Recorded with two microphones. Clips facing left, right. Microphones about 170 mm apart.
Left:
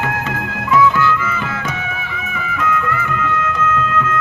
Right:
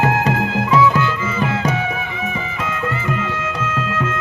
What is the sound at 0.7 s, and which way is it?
Music, 20° right (ahead or behind).